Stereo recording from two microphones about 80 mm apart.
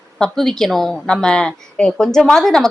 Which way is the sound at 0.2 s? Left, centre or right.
Centre.